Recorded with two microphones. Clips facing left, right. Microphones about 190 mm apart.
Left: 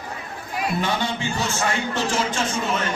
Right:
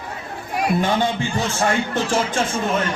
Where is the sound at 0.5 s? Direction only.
50° right (ahead or behind).